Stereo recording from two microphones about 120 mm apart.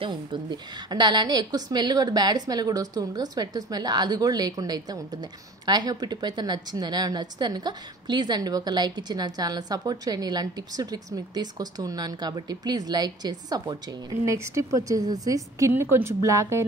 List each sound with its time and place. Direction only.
0.0 s a woman's voice: 40° right (ahead or behind); by 16.6 s 25° right (ahead or behind)